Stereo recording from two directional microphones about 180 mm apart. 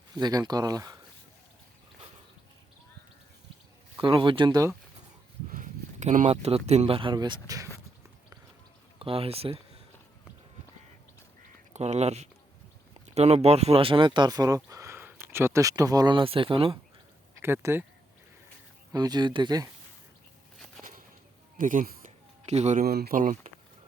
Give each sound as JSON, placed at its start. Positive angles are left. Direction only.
{"t": 0.2, "sound": "speech", "side_deg": -20}
{"t": 3.9, "sound": "speech", "side_deg": -20}
{"t": 5.5, "sound": "speech", "side_deg": -45}
{"t": 9.0, "sound": "speech", "side_deg": -30}
{"t": 11.7, "sound": "speech", "side_deg": -40}
{"t": 17.4, "sound": "speech", "side_deg": -15}
{"t": 18.9, "sound": "speech", "side_deg": -25}
{"t": 20.8, "sound": "a sound", "side_deg": 5}
{"t": 21.6, "sound": "speech", "side_deg": -45}